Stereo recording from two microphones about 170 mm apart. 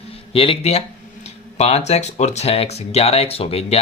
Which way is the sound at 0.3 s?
35° left (ahead or behind).